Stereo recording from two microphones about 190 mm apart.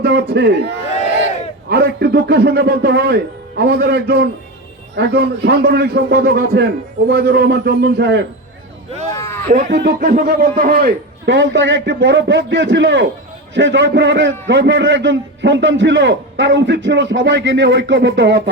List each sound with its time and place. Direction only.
0.0 s a man's voice: 65° right (ahead or behind)
1.7 s a man's voice: 55° right (ahead or behind)
8.9 s a sound: 35° right (ahead or behind)
9.1 s a sound: 15° left (ahead or behind)
9.5 s speech: 45° right (ahead or behind)
9.7 s a man's voice: 55° right (ahead or behind)